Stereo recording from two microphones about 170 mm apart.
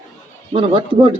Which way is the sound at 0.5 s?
30° right (ahead or behind).